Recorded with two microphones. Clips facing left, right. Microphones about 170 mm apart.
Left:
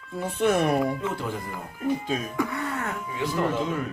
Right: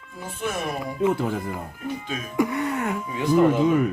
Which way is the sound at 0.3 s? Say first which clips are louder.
Left 7 dB; 65° left (ahead or behind).